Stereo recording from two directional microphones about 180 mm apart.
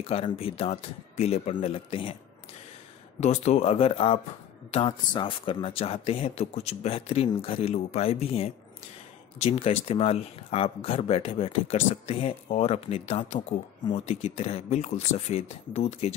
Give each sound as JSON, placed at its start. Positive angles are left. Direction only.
{"t": 0.0, "sound": "speech", "side_deg": 30}
{"t": 3.2, "sound": "speech", "side_deg": 40}